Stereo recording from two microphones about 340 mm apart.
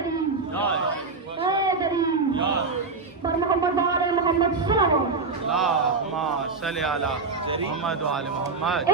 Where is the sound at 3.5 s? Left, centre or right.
Centre.